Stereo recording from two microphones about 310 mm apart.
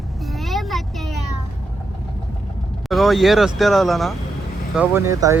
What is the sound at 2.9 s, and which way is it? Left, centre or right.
Speech, centre.